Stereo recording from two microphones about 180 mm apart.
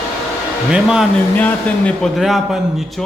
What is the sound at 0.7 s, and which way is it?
Speech, 5° right (ahead or behind).